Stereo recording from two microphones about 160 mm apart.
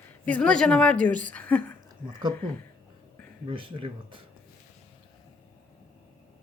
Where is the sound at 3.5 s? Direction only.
35° right (ahead or behind).